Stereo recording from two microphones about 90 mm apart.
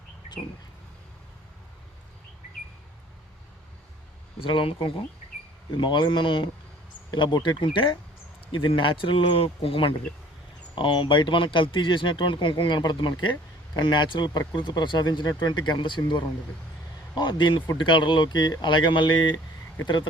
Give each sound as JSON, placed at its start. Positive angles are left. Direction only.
{"t": 4.4, "sound": "speech", "side_deg": 80}
{"t": 5.7, "sound": "speech", "side_deg": 60}
{"t": 10.8, "sound": "speech", "side_deg": 65}